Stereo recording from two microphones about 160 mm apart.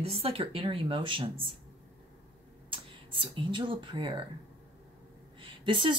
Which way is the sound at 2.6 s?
30° right (ahead or behind).